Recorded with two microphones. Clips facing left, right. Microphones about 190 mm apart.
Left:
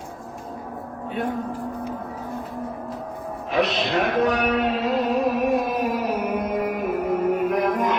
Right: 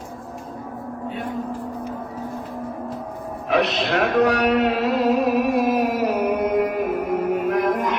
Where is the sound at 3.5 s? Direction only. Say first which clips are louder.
Right 2 dB; 70° right (ahead or behind).